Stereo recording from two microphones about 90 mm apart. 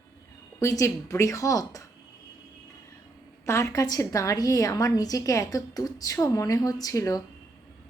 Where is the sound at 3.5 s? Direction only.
35° left (ahead or behind).